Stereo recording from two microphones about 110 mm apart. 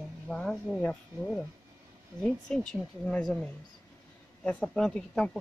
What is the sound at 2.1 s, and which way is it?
Speech, 5° left (ahead or behind).